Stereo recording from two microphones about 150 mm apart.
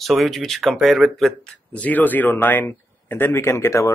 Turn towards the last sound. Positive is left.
turn(degrees=20)  # may be behind; listen again after turning